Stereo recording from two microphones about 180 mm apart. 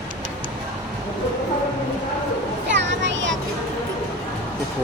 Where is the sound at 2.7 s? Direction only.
85° right.